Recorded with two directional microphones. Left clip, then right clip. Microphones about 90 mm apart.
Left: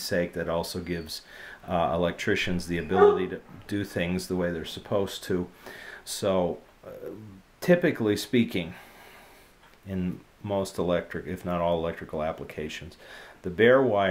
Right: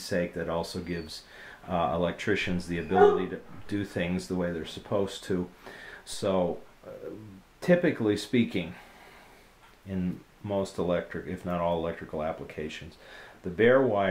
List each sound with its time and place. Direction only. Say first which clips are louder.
0.0 s speech: left 2 dB; 30° left (ahead or behind)
7.6 s speech: left 2 dB; 30° left (ahead or behind)
9.8 s speech: left 1 dB; 30° left (ahead or behind)